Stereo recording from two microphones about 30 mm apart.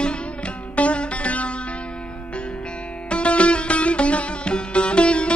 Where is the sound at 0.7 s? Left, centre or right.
Left.